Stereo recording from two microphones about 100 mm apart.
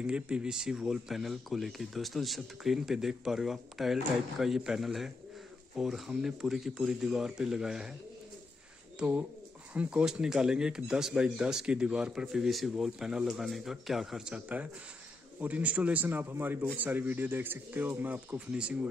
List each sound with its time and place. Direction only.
0.0 s speech: 10° right (ahead or behind)
9.8 s speech: 10° right (ahead or behind)